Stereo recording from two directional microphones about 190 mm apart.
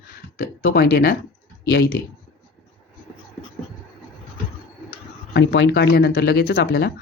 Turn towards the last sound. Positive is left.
turn(degrees=55)  # may be behind; listen again after turning